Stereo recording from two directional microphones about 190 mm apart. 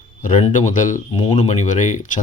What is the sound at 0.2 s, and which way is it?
Speech, 40° left (ahead or behind).